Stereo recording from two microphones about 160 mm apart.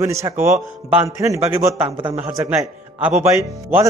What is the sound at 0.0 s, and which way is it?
A man's voice, 20° right (ahead or behind).